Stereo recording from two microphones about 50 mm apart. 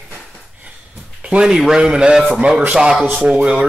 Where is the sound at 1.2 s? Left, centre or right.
Centre.